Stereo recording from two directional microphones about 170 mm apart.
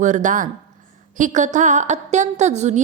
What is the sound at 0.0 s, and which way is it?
Speech, 45° right (ahead or behind).